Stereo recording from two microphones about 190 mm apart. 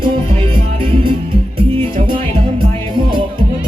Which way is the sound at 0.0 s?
25° right (ahead or behind).